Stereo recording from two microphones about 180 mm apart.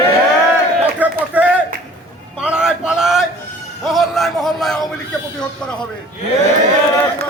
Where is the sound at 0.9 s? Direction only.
10° right (ahead or behind).